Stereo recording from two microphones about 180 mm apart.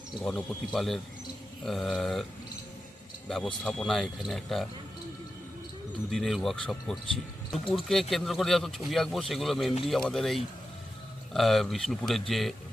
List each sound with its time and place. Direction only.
0.2 s speech: 5° left (ahead or behind)
3.2 s speech: centre (ahead or behind)
6.1 s speech: centre (ahead or behind)